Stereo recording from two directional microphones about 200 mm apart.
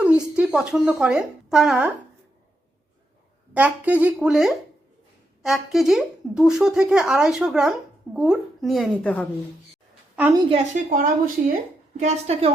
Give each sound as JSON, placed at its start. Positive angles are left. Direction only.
{"t": 0.0, "sound": "speech", "side_deg": -5}
{"t": 3.5, "sound": "a woman's voice", "side_deg": -5}
{"t": 10.2, "sound": "a woman's voice", "side_deg": -10}
{"t": 10.5, "sound": "a woman's voice", "side_deg": -40}